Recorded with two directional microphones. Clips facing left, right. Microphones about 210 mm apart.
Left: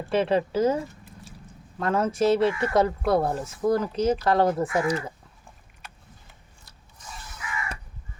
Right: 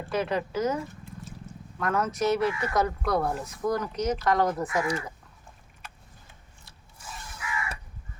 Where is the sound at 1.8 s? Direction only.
30° left (ahead or behind).